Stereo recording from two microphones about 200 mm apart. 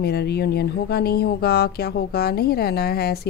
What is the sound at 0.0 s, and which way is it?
A woman's voice, 55° left (ahead or behind).